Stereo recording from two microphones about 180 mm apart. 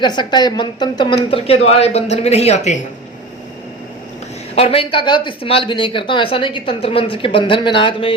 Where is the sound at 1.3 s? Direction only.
35° left (ahead or behind).